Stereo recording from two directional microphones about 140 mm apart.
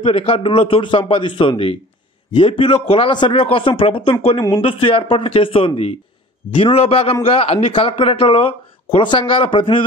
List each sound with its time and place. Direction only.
0.0 s a man's voice: 45° left (ahead or behind)